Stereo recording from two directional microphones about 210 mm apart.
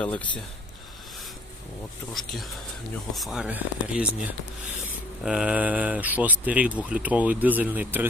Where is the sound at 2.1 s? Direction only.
Centre (ahead or behind).